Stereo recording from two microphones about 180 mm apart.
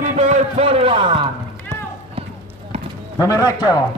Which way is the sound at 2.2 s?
30° right (ahead or behind).